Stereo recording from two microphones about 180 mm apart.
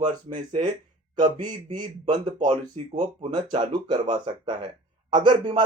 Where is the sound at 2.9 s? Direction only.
40° right (ahead or behind).